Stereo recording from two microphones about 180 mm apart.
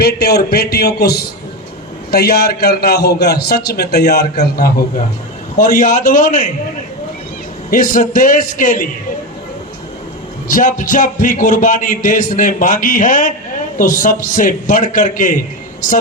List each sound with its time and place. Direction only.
0.0 s a man's voice: 60° left (ahead or behind)
5.5 s speech: 50° left (ahead or behind)
7.7 s speech: 50° left (ahead or behind)
10.5 s speech: 50° left (ahead or behind)